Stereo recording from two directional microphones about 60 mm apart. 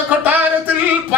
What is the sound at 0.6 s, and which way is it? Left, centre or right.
Female singing, right.